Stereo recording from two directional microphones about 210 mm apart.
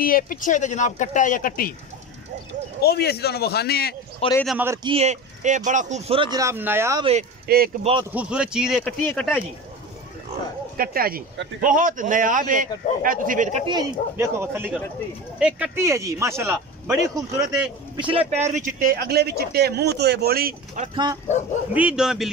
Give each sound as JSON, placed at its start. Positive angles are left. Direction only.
{"t": 0.0, "sound": "speech", "side_deg": 40}
{"t": 2.8, "sound": "speech", "side_deg": 50}
{"t": 4.2, "sound": "a man's voice", "side_deg": 25}
{"t": 4.8, "sound": "speech", "side_deg": -30}
{"t": 7.4, "sound": "speech", "side_deg": -45}
{"t": 7.8, "sound": "speech", "side_deg": -25}
{"t": 8.1, "sound": "speech", "side_deg": -5}
{"t": 8.8, "sound": "speech", "side_deg": 5}
{"t": 10.8, "sound": "a man's voice", "side_deg": -45}
{"t": 13.7, "sound": "speech", "side_deg": -10}
{"t": 17.9, "sound": "a man's voice", "side_deg": -25}
{"t": 18.3, "sound": "speech", "side_deg": -35}
{"t": 20.8, "sound": "speech", "side_deg": -20}
{"t": 21.7, "sound": "speech", "side_deg": -5}